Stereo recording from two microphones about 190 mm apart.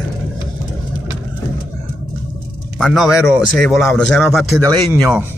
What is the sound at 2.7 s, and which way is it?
A man's voice, centre (ahead or behind).